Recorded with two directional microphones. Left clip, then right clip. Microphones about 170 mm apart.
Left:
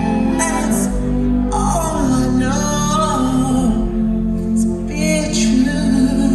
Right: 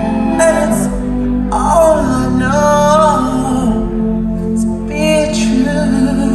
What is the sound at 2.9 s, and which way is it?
Music, 20° right (ahead or behind).